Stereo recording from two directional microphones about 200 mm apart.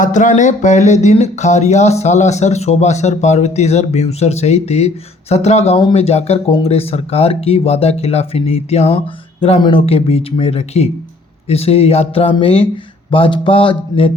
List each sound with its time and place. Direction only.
0.0 s speech: 40° left (ahead or behind)